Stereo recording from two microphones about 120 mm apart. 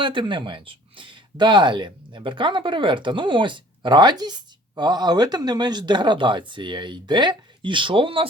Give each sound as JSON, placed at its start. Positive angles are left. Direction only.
{"t": 0.0, "sound": "speech", "side_deg": -45}